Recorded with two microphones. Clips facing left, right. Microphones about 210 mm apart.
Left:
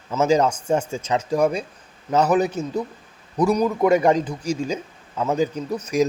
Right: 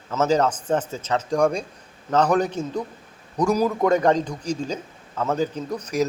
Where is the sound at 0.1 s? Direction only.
10° left (ahead or behind).